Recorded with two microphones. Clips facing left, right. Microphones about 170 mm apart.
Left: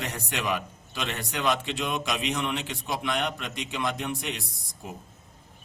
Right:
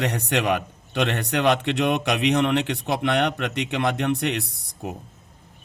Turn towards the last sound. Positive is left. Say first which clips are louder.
# right 7 dB
turn(degrees=-65)  # may be behind; listen again after turning